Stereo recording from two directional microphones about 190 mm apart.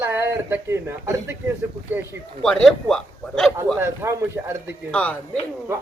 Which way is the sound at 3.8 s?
15° right (ahead or behind).